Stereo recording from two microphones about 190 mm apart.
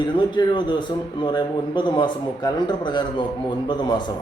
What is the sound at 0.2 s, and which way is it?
A man's voice, 25° left (ahead or behind).